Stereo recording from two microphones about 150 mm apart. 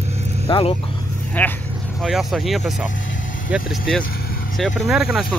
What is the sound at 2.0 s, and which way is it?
Speech, centre (ahead or behind).